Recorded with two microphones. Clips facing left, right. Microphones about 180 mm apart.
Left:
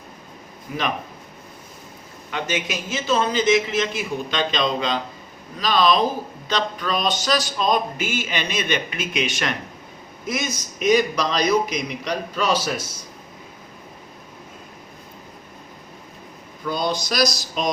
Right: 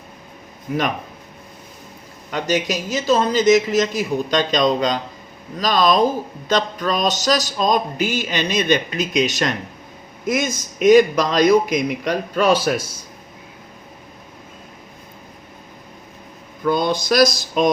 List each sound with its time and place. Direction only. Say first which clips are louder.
2.3 s music: right 5 dB; 40° right (ahead or behind)
5.5 s a man's voice: right 2 dB; 45° right (ahead or behind)
6.5 s music: right 4 dB; 45° right (ahead or behind)
10.2 s a man's voice: right 6 dB; 50° right (ahead or behind)
16.6 s a man's voice: right 6 dB; 55° right (ahead or behind)